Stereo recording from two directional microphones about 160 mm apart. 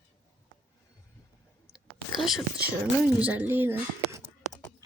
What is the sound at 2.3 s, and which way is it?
Speech, 5° right (ahead or behind).